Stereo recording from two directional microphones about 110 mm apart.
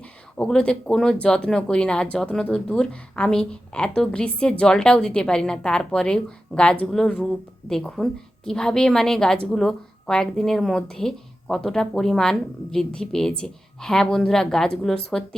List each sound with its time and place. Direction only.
0.0 s speech: 10° left (ahead or behind)